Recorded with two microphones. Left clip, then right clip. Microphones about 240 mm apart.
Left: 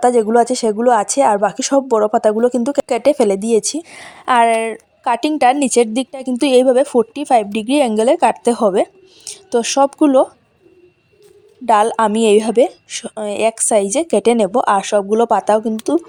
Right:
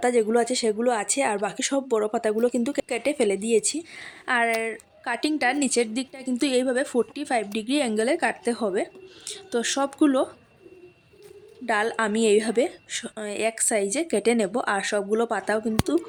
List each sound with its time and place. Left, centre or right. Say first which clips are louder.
0.0 s speech: left 9 dB; left
11.6 s speech: left 11 dB; left